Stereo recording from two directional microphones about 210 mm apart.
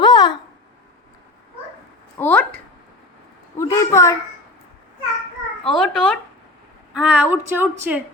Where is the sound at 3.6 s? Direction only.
15° left (ahead or behind).